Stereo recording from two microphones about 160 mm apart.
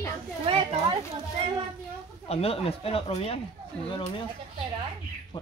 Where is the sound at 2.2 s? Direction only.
40° left (ahead or behind).